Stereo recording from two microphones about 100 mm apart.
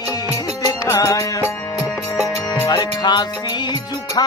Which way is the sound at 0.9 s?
30° left (ahead or behind).